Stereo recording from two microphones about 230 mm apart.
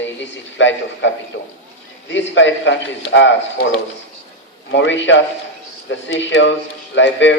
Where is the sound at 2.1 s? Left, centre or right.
Left.